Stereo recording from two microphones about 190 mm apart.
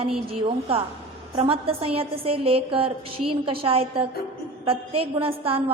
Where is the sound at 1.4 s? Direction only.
30° right (ahead or behind).